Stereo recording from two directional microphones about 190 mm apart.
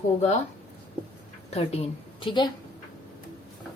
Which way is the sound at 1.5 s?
30° left (ahead or behind).